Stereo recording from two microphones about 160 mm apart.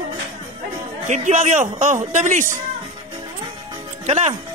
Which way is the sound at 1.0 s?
50° right (ahead or behind).